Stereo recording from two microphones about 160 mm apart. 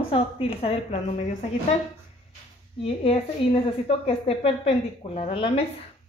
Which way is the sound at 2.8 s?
35° left (ahead or behind).